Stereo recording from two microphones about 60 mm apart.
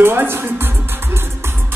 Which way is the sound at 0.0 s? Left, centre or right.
Right.